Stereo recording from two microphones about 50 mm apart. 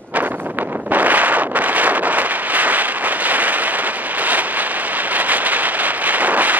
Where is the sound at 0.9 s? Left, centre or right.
Right.